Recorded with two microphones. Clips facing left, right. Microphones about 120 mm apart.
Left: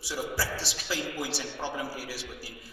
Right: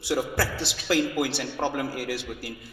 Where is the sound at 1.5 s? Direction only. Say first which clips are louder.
Right 9 dB; 55° right (ahead or behind).